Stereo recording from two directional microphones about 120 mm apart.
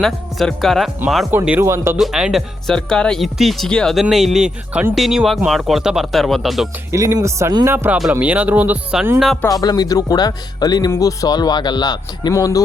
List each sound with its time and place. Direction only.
0.0 s speech: 5° left (ahead or behind)
1.3 s speech: 15° right (ahead or behind)
2.0 s speech: 5° right (ahead or behind)
6.9 s speech: 25° right (ahead or behind); by 9.4 s centre (ahead or behind)
9.5 s speech: 30° left (ahead or behind)